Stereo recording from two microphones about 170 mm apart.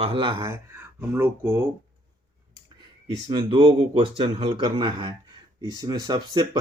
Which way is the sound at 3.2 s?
30° right (ahead or behind).